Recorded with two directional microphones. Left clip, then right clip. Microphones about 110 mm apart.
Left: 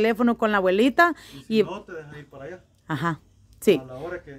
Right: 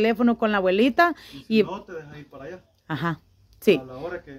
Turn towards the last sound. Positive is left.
turn(degrees=10)  # may be behind; listen again after turning